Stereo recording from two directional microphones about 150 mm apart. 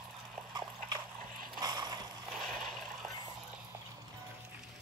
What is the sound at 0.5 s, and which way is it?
Dog, 25° right (ahead or behind).